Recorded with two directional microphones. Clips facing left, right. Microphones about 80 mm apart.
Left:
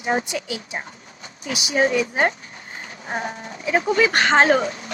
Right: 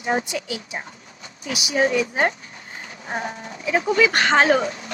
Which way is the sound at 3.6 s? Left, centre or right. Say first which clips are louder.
Even; left.